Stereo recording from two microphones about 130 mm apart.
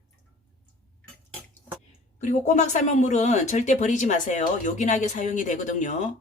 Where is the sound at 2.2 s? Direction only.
65° left (ahead or behind).